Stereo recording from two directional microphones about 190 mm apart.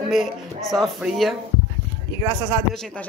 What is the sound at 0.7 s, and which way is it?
Speech, centre (ahead or behind).